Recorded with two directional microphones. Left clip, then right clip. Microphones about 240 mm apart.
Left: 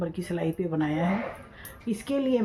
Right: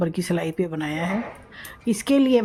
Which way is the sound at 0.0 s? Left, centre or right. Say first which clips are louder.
Right 5 dB; right.